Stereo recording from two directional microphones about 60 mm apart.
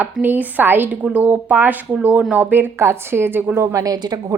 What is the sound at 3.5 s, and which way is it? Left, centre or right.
Speech, right.